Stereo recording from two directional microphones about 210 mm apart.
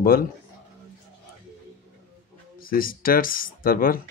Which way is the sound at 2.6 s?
45° left (ahead or behind).